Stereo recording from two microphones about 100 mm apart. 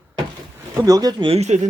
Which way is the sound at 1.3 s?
90° right.